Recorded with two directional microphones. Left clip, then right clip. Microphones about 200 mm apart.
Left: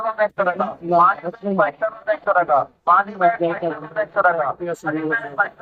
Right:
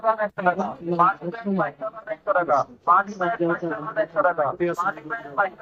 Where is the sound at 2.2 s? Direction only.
50° right (ahead or behind).